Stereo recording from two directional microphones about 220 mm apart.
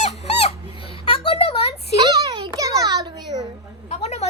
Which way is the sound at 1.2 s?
25° left (ahead or behind).